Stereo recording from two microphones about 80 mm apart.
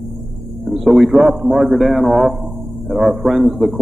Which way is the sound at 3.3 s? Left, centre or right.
Centre.